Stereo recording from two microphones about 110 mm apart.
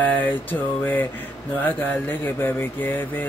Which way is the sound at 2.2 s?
20° left (ahead or behind).